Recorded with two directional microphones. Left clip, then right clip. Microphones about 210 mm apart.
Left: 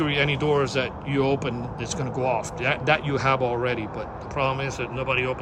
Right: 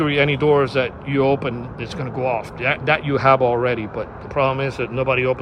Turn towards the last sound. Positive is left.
turn(degrees=0)  # may be behind; listen again after turning